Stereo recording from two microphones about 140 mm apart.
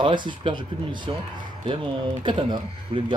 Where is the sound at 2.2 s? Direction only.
35° right (ahead or behind).